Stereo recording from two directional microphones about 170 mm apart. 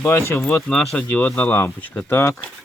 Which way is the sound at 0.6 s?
5° left (ahead or behind).